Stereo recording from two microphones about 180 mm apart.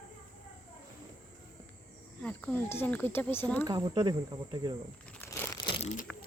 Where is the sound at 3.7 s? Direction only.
20° right (ahead or behind).